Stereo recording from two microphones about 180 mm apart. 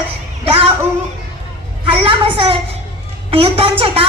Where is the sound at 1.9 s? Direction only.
30° right (ahead or behind).